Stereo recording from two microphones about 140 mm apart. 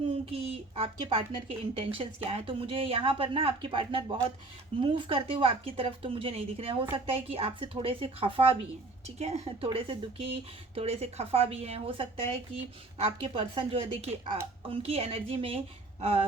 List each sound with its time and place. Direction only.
0.1 s a woman's voice: 45° right (ahead or behind)
9.6 s a woman's voice: 40° right (ahead or behind)